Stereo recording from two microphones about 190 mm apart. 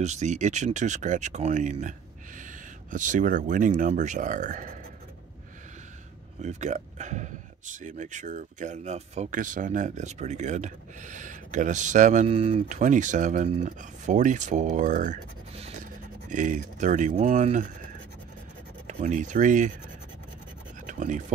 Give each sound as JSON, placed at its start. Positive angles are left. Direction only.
{"t": 0.0, "sound": "speech", "side_deg": -40}
{"t": 6.4, "sound": "speech", "side_deg": -40}
{"t": 18.9, "sound": "speech", "side_deg": -40}
{"t": 20.8, "sound": "scratch", "side_deg": -40}